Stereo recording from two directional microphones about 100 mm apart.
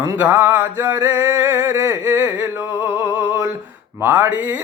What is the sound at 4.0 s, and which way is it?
Speech, 20° right (ahead or behind).